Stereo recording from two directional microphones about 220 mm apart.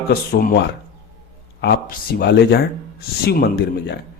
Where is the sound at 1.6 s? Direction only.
45° left (ahead or behind).